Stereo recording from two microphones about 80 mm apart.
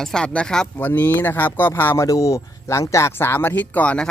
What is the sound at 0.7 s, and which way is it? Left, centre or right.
Speech, left.